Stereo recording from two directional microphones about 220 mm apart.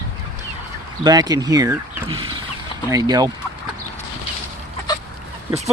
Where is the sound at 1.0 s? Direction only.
20° right (ahead or behind).